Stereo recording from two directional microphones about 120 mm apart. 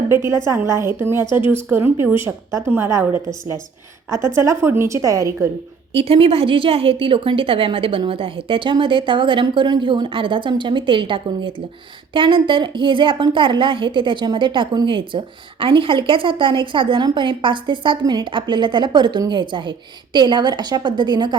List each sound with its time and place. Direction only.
0.1 s a woman's voice: 20° right (ahead or behind)
5.9 s a woman's voice: 50° right (ahead or behind)